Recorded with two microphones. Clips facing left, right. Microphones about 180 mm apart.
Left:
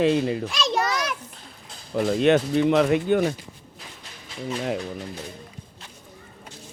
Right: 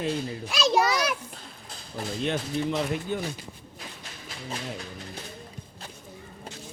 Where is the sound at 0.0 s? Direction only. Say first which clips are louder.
Left 9 dB; 85° left.